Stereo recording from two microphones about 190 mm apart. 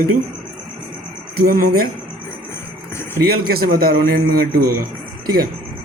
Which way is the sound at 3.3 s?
50° right (ahead or behind).